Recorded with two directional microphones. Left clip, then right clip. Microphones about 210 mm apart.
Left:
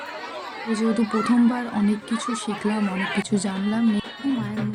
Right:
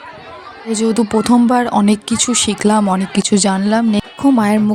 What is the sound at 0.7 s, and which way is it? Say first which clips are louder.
Speech: right 9 dB; 45° right (ahead or behind).